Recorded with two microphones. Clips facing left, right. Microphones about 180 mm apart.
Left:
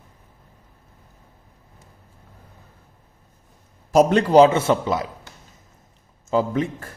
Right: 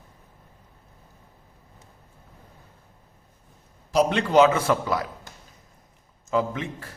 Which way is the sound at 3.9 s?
45° left (ahead or behind).